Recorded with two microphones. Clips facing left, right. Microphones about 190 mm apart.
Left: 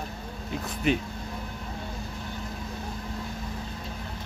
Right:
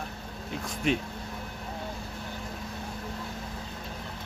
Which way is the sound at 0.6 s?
Centre (ahead or behind).